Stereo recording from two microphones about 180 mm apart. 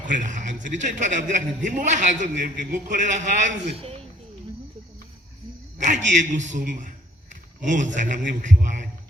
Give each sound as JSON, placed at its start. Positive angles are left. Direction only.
{"t": 0.1, "sound": "a man's voice", "side_deg": -45}
{"t": 6.1, "sound": "a man's voice", "side_deg": -45}